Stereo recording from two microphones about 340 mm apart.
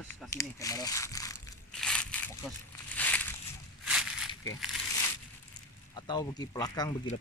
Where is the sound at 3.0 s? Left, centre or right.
Centre.